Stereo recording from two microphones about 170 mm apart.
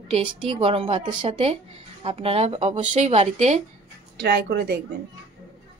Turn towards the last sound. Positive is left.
turn(degrees=-75)  # may be behind; listen again after turning